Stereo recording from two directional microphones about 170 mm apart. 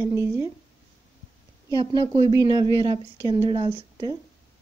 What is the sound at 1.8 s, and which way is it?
Speech, 25° right (ahead or behind).